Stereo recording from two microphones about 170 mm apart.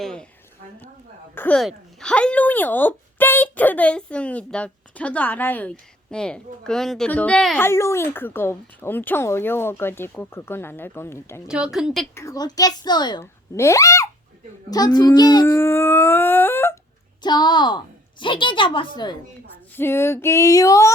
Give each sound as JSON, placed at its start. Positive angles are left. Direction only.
{"t": 0.0, "sound": "speech", "side_deg": 5}
{"t": 1.4, "sound": "speech", "side_deg": 5}
{"t": 7.6, "sound": "speech", "side_deg": 15}
{"t": 11.4, "sound": "speech", "side_deg": -5}
{"t": 12.1, "sound": "a child's voice", "side_deg": 20}
{"t": 17.2, "sound": "a child's voice", "side_deg": 25}
{"t": 19.7, "sound": "speech", "side_deg": 15}